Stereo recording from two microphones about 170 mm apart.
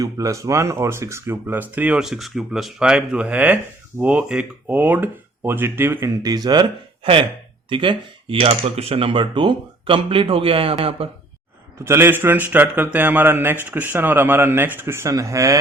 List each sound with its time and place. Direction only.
0.0 s speech: 20° right (ahead or behind); by 11.1 s 35° right (ahead or behind)
11.9 s speech: 15° right (ahead or behind)